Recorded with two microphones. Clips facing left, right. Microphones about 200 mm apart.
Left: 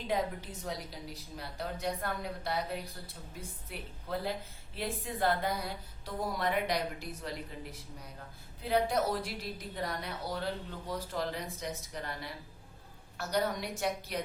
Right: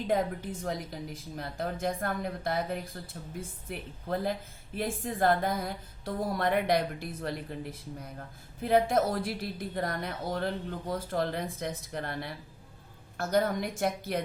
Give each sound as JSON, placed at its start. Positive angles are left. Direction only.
{"t": 0.1, "sound": "a woman's voice", "side_deg": -50}